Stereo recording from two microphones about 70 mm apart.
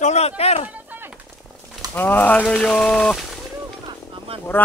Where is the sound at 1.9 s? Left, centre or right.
Left.